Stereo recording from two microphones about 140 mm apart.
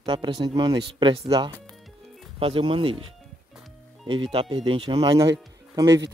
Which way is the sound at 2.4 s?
40° right (ahead or behind).